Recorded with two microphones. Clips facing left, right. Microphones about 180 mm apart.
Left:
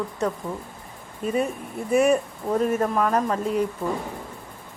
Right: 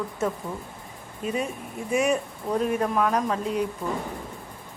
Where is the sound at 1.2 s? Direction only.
50° left (ahead or behind).